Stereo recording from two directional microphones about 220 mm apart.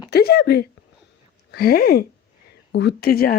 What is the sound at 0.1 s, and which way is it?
Speech, 45° left (ahead or behind).